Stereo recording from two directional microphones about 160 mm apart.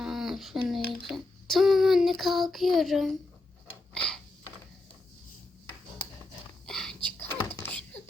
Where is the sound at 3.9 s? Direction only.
5° left (ahead or behind).